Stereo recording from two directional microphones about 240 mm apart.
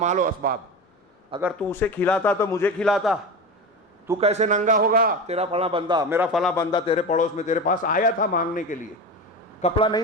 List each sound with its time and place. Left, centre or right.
0.0 s a man's voice: right
1.5 s a man's voice: centre
4.2 s a man's voice: right; by 6.7 s centre
6.7 s a man's voice: left
9.6 s speech: left